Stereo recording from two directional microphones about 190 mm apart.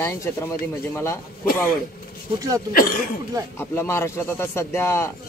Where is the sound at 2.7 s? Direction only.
50° left (ahead or behind).